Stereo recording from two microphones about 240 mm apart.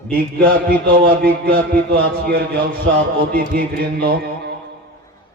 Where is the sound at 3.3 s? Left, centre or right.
Right.